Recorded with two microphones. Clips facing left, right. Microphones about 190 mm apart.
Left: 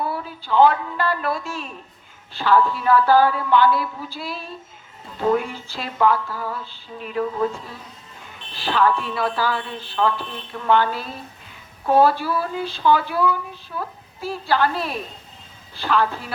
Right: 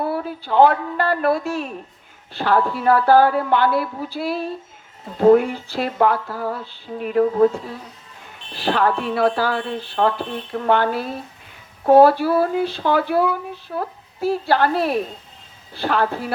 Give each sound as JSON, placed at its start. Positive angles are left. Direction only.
{"t": 0.0, "sound": "a woman's voice", "side_deg": -60}
{"t": 5.0, "sound": "speech", "side_deg": -50}
{"t": 8.5, "sound": "speech", "side_deg": -60}